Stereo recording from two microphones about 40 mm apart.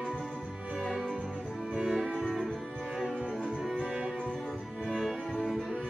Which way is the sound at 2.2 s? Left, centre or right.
Centre.